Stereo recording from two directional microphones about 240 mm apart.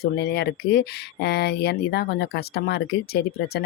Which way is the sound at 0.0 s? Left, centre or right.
Left.